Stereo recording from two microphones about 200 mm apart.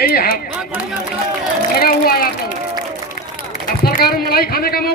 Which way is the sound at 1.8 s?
50° left (ahead or behind).